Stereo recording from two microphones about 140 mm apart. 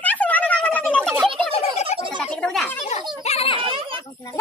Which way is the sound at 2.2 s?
10° left (ahead or behind).